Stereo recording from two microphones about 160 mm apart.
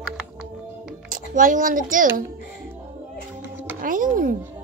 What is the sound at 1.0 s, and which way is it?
Speech, 60° right (ahead or behind).